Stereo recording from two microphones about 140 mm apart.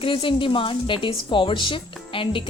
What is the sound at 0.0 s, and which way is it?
A woman's voice, 40° left (ahead or behind).